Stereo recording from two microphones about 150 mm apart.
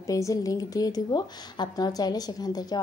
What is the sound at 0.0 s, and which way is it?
A woman's voice, 20° left (ahead or behind).